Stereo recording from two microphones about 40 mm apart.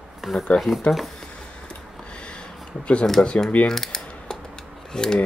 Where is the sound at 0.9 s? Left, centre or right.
Left.